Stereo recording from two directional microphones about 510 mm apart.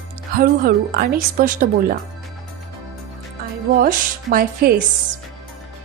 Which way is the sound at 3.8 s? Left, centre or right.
Centre.